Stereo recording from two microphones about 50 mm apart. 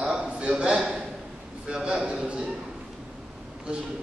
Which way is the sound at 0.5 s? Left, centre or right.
Centre.